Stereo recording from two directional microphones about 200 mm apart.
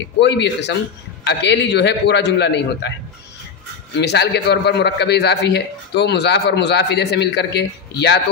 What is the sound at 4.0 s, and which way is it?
Speech, 55° left (ahead or behind).